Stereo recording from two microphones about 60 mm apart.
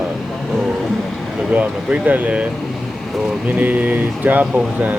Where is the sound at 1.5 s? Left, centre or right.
Right.